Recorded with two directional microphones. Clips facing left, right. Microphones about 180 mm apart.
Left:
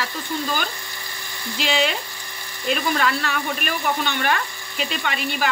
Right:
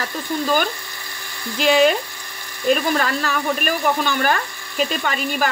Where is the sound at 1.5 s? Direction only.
45° right (ahead or behind).